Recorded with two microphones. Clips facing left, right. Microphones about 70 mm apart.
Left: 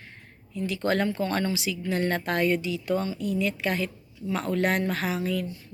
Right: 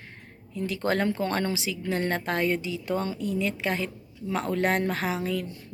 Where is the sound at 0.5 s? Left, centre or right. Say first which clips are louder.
Left 1 dB; right.